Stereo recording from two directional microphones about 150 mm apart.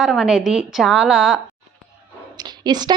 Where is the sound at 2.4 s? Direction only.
30° right (ahead or behind).